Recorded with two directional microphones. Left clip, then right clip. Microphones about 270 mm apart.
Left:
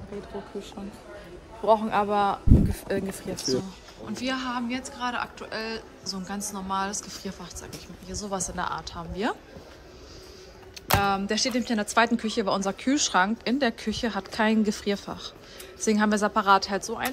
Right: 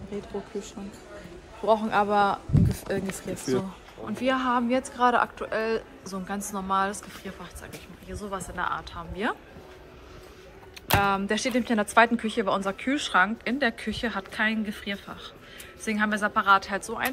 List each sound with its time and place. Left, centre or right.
0.5 s a man's voice: centre
4.0 s speech: centre
10.9 s speech: centre